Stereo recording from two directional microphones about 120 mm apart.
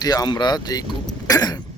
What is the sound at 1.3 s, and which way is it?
Throat clearing, 30° left (ahead or behind).